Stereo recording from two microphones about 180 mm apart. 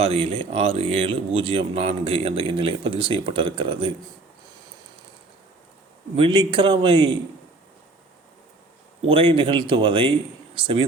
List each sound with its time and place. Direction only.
0.0 s speech: 30° right (ahead or behind)
6.1 s a man's voice: 30° right (ahead or behind)
9.0 s a man's voice: 30° right (ahead or behind)